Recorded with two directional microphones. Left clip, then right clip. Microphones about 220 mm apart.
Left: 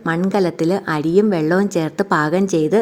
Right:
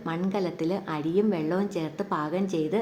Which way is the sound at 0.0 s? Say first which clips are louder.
Left 11 dB; 40° left (ahead or behind).